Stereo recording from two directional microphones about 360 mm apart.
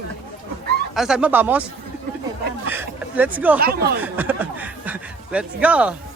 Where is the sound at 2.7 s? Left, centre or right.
Centre.